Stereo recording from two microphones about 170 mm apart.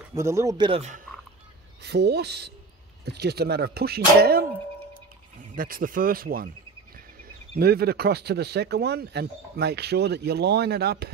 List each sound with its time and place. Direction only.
0.1 s speech: 15° right (ahead or behind)
0.7 s speech: 35° right (ahead or behind)
1.8 s speech: 75° right (ahead or behind)
5.6 s speech: 55° right (ahead or behind)
7.5 s speech: 65° right (ahead or behind)